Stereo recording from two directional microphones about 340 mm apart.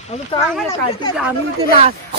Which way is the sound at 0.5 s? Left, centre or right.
Centre.